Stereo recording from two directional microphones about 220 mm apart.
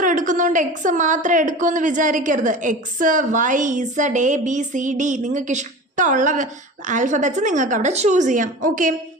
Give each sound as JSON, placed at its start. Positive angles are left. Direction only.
{"t": 0.0, "sound": "a woman's voice", "side_deg": -35}